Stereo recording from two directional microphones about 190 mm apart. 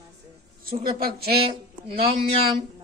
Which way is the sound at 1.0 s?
55° right (ahead or behind).